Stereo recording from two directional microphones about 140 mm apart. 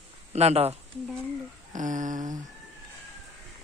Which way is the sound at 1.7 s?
65° right (ahead or behind).